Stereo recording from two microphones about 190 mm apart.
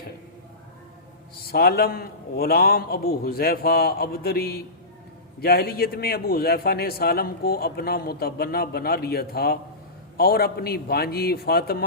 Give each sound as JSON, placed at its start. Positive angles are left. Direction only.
{"t": 1.4, "sound": "a man's voice", "side_deg": 55}